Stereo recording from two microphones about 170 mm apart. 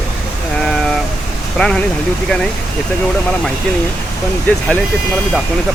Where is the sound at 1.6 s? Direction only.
5° left (ahead or behind).